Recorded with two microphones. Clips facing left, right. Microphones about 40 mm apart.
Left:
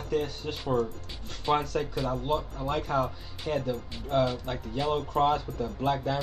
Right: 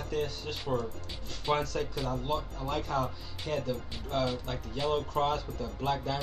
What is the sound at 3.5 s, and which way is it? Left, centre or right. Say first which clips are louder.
Speech: left 3 dB; centre.